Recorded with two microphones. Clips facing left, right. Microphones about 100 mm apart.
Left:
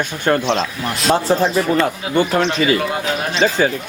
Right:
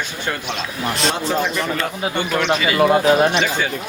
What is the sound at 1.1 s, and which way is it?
Speech, 35° left (ahead or behind).